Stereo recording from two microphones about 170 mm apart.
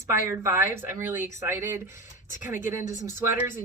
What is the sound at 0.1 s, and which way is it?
Speech, 15° right (ahead or behind).